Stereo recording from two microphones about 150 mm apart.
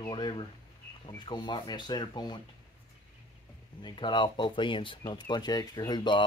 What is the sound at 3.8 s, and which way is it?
Speech, 30° left (ahead or behind).